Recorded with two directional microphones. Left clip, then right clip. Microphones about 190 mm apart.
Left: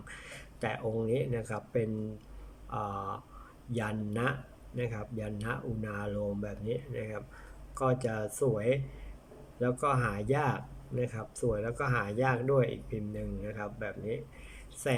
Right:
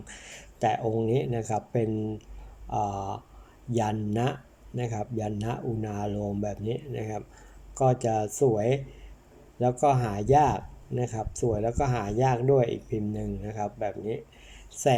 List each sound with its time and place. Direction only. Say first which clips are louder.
0.1 s speech: even; 15° right (ahead or behind)